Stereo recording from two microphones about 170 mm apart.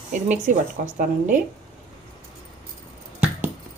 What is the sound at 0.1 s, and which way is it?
Speech, 50° right (ahead or behind).